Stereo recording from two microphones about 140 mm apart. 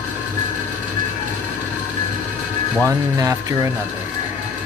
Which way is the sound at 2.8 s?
25° right (ahead or behind).